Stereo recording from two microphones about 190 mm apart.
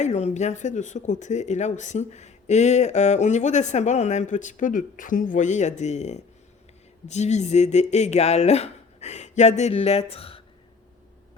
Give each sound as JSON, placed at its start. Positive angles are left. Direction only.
{"t": 0.0, "sound": "speech", "side_deg": 35}